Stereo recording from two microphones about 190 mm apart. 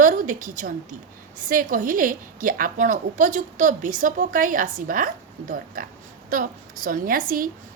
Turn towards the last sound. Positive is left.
turn(degrees=-50)  # may be behind; listen again after turning